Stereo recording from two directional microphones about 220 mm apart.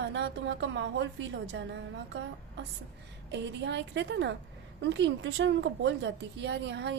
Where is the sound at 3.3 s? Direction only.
55° right (ahead or behind).